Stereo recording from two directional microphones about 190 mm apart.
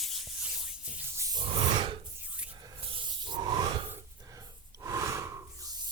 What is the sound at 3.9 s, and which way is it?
Snort, 20° right (ahead or behind).